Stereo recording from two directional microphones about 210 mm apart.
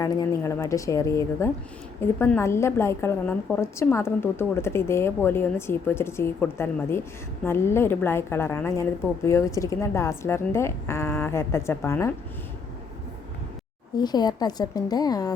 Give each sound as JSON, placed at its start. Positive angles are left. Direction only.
{"t": 0.0, "sound": "a woman's voice", "side_deg": 15}
{"t": 13.9, "sound": "a woman's voice", "side_deg": 20}